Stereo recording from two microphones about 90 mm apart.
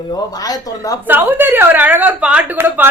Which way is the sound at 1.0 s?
20° right (ahead or behind).